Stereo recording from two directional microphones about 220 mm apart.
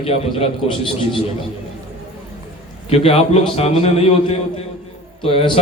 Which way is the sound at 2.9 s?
25° left (ahead or behind).